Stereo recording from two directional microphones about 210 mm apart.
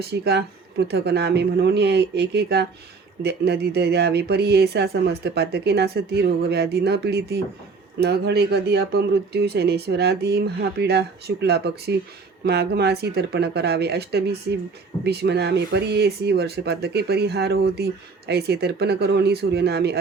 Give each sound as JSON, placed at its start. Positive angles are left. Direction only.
{"t": 0.0, "sound": "speech", "side_deg": -50}